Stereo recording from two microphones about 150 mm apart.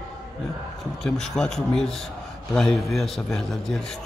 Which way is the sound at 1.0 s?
5° left (ahead or behind).